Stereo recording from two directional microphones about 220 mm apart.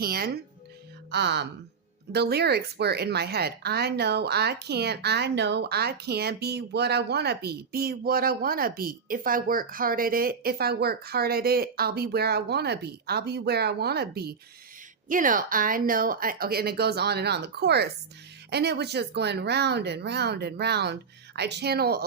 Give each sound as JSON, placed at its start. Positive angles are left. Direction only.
{"t": 0.0, "sound": "a woman's voice", "side_deg": -45}